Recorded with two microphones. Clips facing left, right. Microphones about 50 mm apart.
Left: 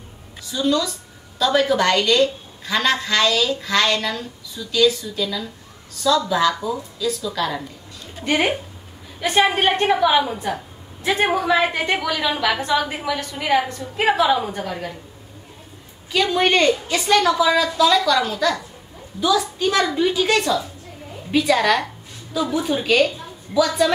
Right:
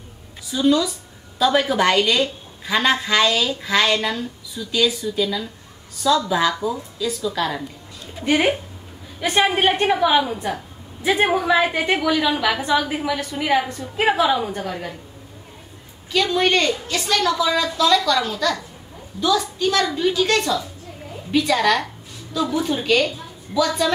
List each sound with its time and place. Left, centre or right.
0.5 s a woman's voice: centre
11.0 s a woman's voice: centre
16.1 s a woman's voice: centre